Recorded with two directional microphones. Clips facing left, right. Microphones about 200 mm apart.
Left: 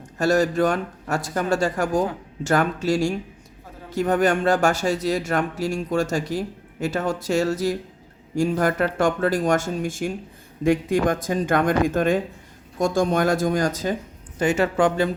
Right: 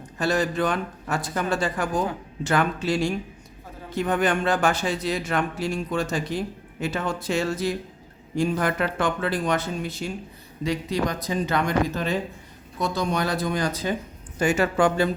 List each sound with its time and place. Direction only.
0.2 s speech: 45° left (ahead or behind)
14.3 s speech: 25° left (ahead or behind)